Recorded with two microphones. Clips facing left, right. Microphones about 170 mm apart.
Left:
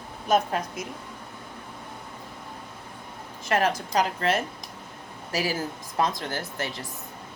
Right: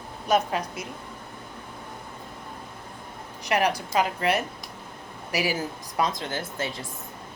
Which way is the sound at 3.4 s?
15° right (ahead or behind).